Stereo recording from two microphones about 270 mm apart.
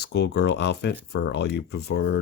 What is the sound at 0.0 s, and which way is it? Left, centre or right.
Speech, left.